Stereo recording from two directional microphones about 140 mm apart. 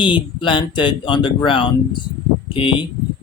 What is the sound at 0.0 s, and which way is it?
Speech, 35° left (ahead or behind).